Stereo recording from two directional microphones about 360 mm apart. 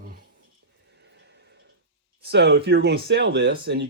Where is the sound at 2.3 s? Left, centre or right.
Right.